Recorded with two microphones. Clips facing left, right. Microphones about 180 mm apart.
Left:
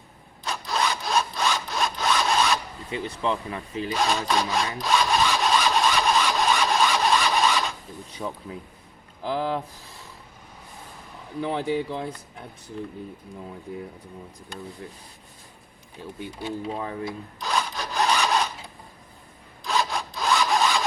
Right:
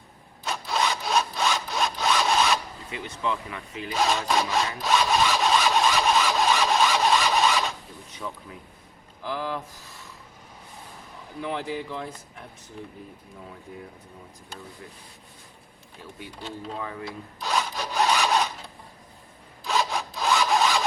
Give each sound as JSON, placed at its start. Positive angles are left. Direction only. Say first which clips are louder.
{"t": 0.4, "sound": "sawing", "louder": "even", "side_deg": 0}
{"t": 2.9, "sound": "speech", "louder": "left 3 dB", "side_deg": 35}
{"t": 3.9, "sound": "sawing", "louder": "right 1 dB", "side_deg": -5}
{"t": 8.2, "sound": "speech", "louder": "left 4 dB", "side_deg": 35}
{"t": 11.4, "sound": "a man's voice", "louder": "left 5 dB", "side_deg": 25}
{"t": 16.4, "sound": "speech", "louder": "left 5 dB", "side_deg": 10}
{"t": 17.4, "sound": "sawing", "louder": "even", "side_deg": -5}
{"t": 19.6, "sound": "sawing", "louder": "even", "side_deg": 0}